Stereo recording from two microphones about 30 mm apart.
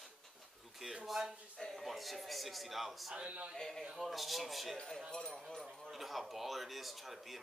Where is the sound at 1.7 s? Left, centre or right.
Centre.